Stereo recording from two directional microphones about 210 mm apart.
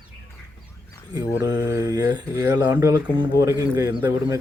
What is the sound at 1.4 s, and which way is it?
A man's voice, 10° right (ahead or behind).